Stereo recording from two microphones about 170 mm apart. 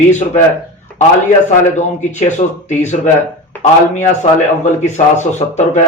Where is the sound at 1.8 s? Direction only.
45° left (ahead or behind).